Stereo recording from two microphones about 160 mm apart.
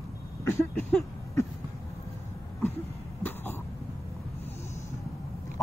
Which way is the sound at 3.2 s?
15° left (ahead or behind).